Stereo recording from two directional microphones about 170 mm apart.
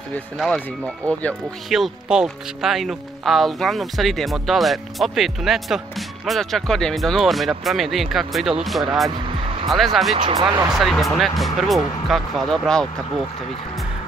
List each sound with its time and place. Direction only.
0.4 s speech: 5° left (ahead or behind)
10.1 s speech: 30° right (ahead or behind)
10.7 s speech: centre (ahead or behind)